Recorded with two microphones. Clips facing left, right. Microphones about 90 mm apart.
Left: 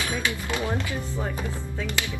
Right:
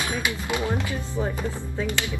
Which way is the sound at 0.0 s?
20° right (ahead or behind).